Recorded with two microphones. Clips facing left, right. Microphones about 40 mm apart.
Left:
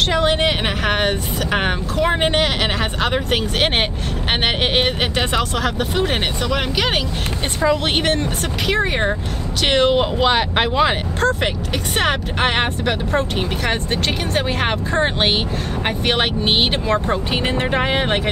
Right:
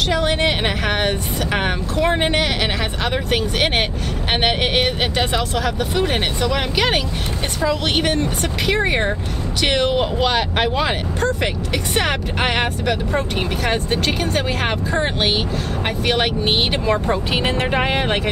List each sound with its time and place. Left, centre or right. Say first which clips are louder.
0.1 s speech: left 2 dB; left
0.4 s speech: even; centre
3.0 s speech: left 1 dB; centre
4.7 s speech: even; centre
7.6 s speech: left 2 dB; left
8.2 s speech: right 1 dB; centre
9.7 s speech: left 3 dB; left
11.4 s speech: even; centre
16.1 s speech: even; left
16.8 s speech: even; centre